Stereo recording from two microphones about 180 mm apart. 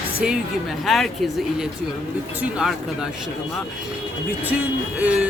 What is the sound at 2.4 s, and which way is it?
Speech, 5° right (ahead or behind).